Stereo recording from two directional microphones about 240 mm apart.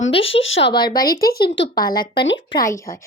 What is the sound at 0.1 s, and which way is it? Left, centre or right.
Speech, left.